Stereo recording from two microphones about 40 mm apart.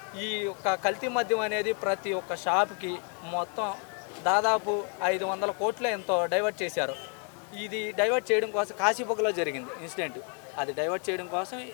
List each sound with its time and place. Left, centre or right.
0.2 s speech: centre